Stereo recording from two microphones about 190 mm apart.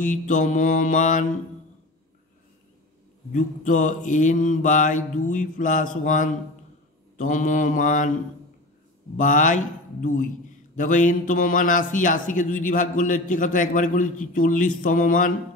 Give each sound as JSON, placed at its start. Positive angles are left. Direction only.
{"t": 0.0, "sound": "mantra", "side_deg": 40}
{"t": 3.3, "sound": "mantra", "side_deg": 40}
{"t": 7.2, "sound": "a man's voice", "side_deg": 40}
{"t": 9.1, "sound": "mantra", "side_deg": 40}
{"t": 10.8, "sound": "a man's voice", "side_deg": 40}